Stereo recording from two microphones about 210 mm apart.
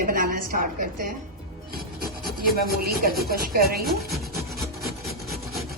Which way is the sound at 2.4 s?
45° right (ahead or behind).